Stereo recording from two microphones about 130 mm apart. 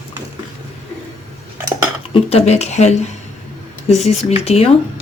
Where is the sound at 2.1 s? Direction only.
50° left (ahead or behind).